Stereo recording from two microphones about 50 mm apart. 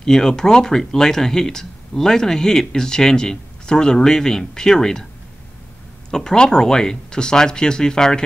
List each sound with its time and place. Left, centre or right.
0.0 s speech: centre
6.1 s speech: centre